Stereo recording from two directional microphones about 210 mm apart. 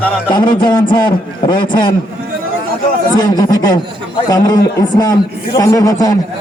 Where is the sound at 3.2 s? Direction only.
15° left (ahead or behind).